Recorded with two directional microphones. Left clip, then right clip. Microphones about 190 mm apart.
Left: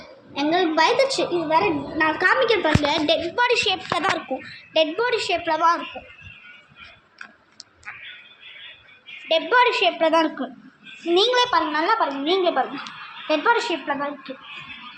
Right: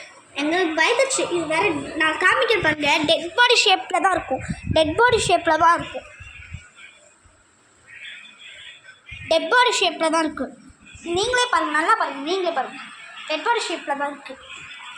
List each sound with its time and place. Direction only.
0.3 s a woman's voice: 5° left (ahead or behind)
3.3 s a woman's voice: centre (ahead or behind)
9.5 s a woman's voice: 10° right (ahead or behind)
11.1 s a woman's voice: 15° left (ahead or behind)
11.5 s a woman's voice: centre (ahead or behind)
11.9 s a woman's voice: 10° left (ahead or behind)
13.9 s a woman's voice: 10° right (ahead or behind)